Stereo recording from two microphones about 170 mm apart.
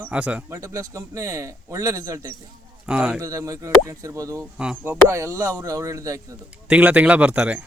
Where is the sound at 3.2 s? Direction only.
20° right (ahead or behind).